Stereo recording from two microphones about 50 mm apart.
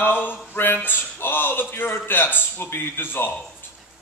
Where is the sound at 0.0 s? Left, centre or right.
Left.